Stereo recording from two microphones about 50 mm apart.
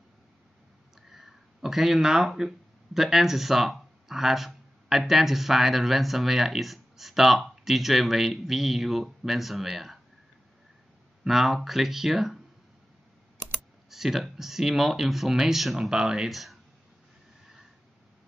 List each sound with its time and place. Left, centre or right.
1.0 s speech: centre
11.2 s speech: centre
13.8 s speech: centre